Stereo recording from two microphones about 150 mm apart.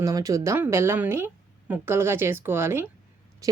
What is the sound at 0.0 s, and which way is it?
A woman's voice, 25° right (ahead or behind).